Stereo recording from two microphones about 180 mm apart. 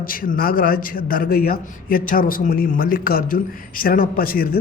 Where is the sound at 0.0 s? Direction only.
50° left (ahead or behind).